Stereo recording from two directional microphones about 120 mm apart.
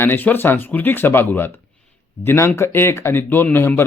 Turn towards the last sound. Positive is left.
turn(degrees=20)  # may be behind; listen again after turning